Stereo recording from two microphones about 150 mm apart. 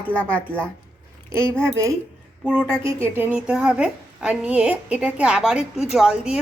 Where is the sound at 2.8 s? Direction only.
35° left (ahead or behind).